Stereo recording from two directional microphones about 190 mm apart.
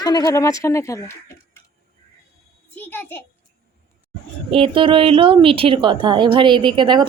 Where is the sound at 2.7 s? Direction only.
10° left (ahead or behind).